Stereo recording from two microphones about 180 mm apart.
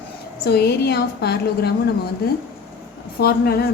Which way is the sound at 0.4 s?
65° left (ahead or behind).